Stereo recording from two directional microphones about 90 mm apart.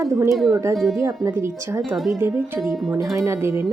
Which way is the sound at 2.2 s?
30° right (ahead or behind).